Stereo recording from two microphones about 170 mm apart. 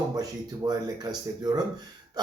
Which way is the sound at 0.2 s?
20° right (ahead or behind).